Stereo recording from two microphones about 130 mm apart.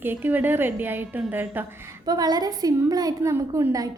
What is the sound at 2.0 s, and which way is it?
A woman's voice, 30° right (ahead or behind).